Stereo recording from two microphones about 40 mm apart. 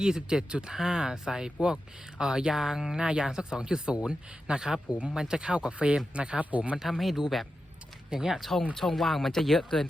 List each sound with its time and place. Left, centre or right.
0.0 s speech: centre
6.8 s speech: centre
8.1 s speech: centre
8.4 s speech: centre